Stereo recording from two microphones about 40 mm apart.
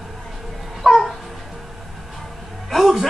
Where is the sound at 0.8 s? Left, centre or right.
Centre.